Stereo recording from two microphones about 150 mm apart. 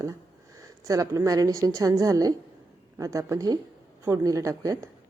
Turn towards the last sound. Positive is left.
turn(degrees=-20)  # may be behind; listen again after turning